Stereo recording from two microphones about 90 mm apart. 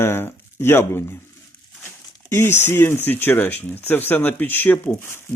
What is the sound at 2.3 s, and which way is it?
Speech, 25° left (ahead or behind).